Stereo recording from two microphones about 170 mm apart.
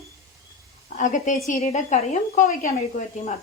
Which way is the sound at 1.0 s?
50° left (ahead or behind).